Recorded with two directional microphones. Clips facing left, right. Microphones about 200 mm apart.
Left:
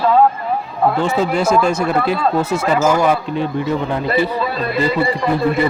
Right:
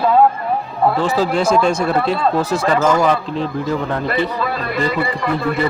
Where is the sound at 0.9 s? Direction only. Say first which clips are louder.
Even; centre (ahead or behind).